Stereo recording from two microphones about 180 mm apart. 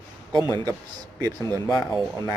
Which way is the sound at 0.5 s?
20° right (ahead or behind).